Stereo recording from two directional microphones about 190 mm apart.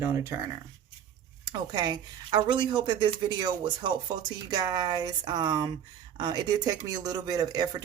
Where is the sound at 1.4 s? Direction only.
20° right (ahead or behind).